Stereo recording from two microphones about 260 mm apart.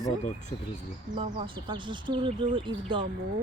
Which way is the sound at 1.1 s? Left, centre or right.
Right.